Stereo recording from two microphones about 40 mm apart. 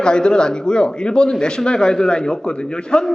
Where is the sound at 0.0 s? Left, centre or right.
Left.